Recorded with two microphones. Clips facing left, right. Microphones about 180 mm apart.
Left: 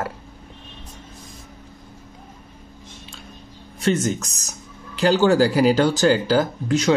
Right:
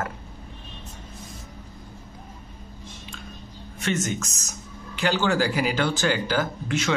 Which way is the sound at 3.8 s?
35° left (ahead or behind).